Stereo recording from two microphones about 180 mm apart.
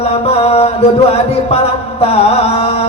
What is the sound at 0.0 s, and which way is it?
Mantra, 35° left (ahead or behind).